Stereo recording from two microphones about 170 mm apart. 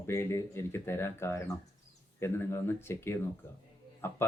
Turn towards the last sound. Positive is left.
turn(degrees=15)  # may be behind; listen again after turning